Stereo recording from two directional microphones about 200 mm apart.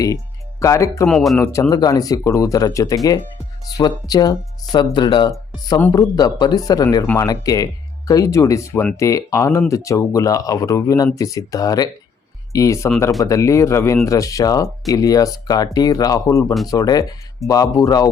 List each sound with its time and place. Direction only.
0.6 s speech: 15° left (ahead or behind)
1.0 s speech: centre (ahead or behind)
1.7 s speech: 20° left (ahead or behind)